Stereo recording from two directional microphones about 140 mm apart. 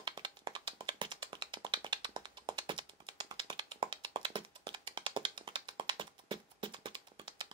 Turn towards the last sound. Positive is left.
turn(degrees=-35)  # may be behind; listen again after turning